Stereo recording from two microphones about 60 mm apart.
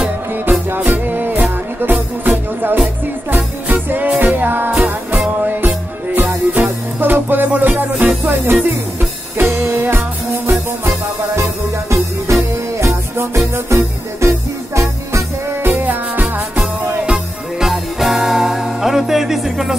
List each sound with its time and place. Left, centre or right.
0.3 s music: right
6.1 s music: right
12.3 s music: right
15.6 s music: right
17.0 s music: centre